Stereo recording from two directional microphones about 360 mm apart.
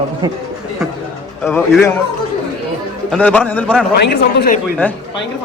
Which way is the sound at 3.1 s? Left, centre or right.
Centre.